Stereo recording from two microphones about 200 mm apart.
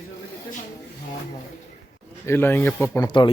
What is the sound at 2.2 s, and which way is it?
Speech, 10° left (ahead or behind).